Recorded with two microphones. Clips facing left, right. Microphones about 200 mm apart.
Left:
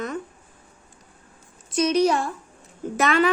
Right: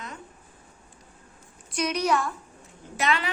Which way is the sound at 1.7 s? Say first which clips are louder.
Left 6 dB; 25° left (ahead or behind).